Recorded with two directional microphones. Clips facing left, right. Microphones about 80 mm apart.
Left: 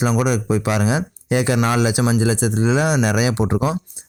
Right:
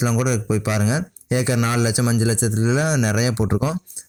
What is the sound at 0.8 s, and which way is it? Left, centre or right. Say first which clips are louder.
Speech: left 2 dB; left.